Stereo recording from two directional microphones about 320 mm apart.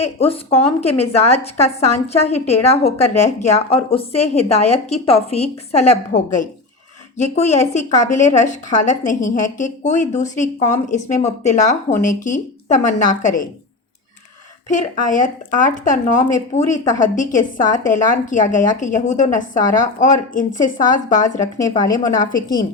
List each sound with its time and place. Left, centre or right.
0.2 s a woman's voice: centre
14.7 s a woman's voice: left